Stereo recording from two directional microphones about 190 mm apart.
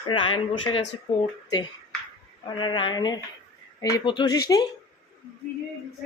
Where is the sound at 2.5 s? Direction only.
25° left (ahead or behind).